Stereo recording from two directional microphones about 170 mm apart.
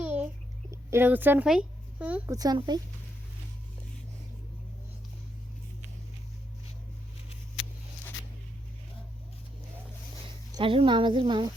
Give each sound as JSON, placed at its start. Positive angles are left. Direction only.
{"t": 0.0, "sound": "a sound", "side_deg": -10}
{"t": 0.7, "sound": "speech", "side_deg": -15}
{"t": 2.3, "sound": "a woman's voice", "side_deg": -20}
{"t": 10.5, "sound": "a woman's voice", "side_deg": -30}